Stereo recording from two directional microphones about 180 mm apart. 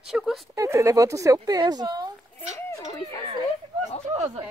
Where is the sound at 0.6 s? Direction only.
15° right (ahead or behind).